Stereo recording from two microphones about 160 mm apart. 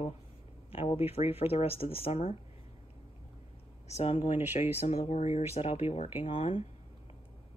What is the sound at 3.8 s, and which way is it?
Speech, 45° left (ahead or behind).